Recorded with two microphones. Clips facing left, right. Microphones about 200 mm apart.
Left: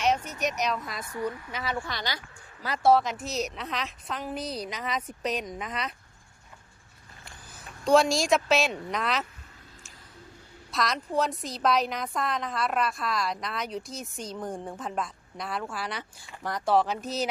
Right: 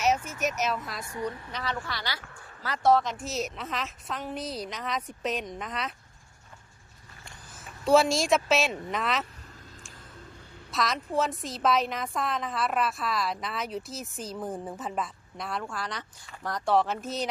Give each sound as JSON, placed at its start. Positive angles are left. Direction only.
{"t": 0.2, "sound": "speech", "side_deg": 35}
{"t": 0.4, "sound": "a woman's voice", "side_deg": -5}
{"t": 1.0, "sound": "a woman's voice", "side_deg": -20}
{"t": 1.5, "sound": "a woman's voice", "side_deg": 10}
{"t": 7.5, "sound": "speech", "side_deg": 0}
{"t": 10.7, "sound": "a woman's voice", "side_deg": 0}